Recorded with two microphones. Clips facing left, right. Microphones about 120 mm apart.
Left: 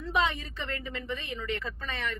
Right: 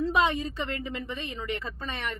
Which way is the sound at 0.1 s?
20° right (ahead or behind).